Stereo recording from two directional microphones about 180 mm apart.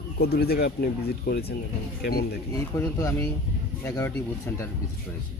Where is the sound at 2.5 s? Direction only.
20° left (ahead or behind).